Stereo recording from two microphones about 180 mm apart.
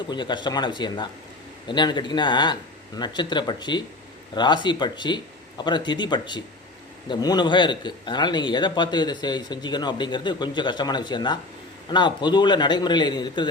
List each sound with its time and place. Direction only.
0.1 s a man's voice: 25° left (ahead or behind)